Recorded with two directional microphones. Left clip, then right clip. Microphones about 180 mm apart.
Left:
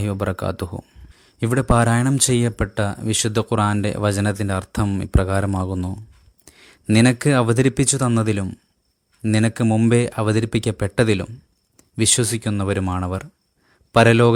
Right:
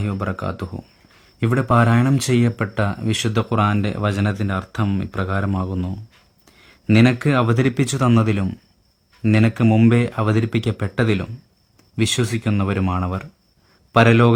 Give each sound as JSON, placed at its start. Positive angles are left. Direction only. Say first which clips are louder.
{"t": 0.0, "sound": "speech", "louder": "left 2 dB", "side_deg": 35}
{"t": 6.4, "sound": "a sound", "louder": "left 3 dB", "side_deg": 35}
{"t": 6.9, "sound": "speech", "louder": "even", "side_deg": 35}
{"t": 9.6, "sound": "speech", "louder": "right 4 dB", "side_deg": 20}
{"t": 9.9, "sound": "speech", "louder": "left 1 dB", "side_deg": 30}